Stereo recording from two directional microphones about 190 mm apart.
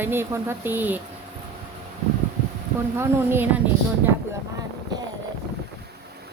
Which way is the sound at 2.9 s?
10° right (ahead or behind).